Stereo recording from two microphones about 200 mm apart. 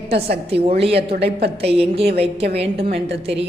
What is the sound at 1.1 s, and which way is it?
Speech, 55° right (ahead or behind).